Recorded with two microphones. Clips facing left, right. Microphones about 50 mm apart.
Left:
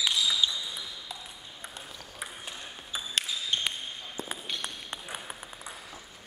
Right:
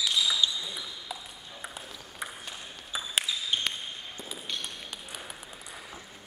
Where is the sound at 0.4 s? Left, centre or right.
Centre.